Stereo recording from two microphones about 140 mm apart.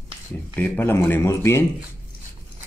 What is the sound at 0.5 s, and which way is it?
A man's voice, 10° left (ahead or behind).